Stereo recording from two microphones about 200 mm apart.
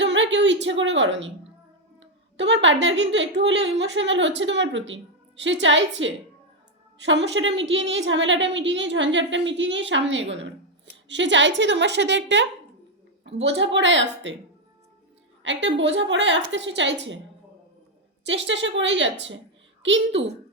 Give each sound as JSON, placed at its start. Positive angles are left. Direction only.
{"t": 0.0, "sound": "a woman's voice", "side_deg": -65}
{"t": 2.0, "sound": "a sound", "side_deg": -65}
{"t": 2.8, "sound": "a woman's voice", "side_deg": -65}
{"t": 15.4, "sound": "a woman's voice", "side_deg": -65}
{"t": 18.3, "sound": "a woman's voice", "side_deg": -65}